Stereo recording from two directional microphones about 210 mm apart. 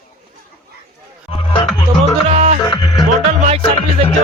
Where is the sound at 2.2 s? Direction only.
30° right (ahead or behind).